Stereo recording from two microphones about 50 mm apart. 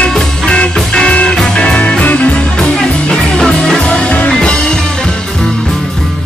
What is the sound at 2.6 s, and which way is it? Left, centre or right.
Music, centre.